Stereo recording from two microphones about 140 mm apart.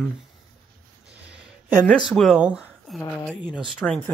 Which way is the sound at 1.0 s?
10° right (ahead or behind).